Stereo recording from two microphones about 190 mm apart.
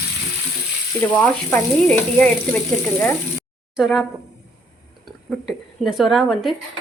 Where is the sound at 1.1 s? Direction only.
5° left (ahead or behind).